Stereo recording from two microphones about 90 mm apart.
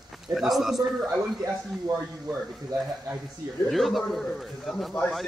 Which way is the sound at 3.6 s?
Centre (ahead or behind).